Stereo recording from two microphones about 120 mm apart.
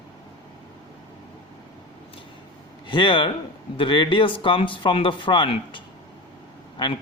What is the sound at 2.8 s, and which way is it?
Speech, 45° left (ahead or behind).